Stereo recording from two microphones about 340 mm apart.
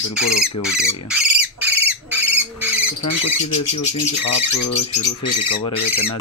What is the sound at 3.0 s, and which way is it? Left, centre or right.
Speech, left.